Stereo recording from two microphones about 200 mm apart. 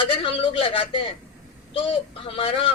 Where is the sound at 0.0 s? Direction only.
25° left (ahead or behind).